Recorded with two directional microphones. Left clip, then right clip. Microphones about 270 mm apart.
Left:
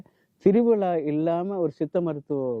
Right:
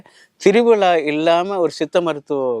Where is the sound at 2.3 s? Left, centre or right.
Right.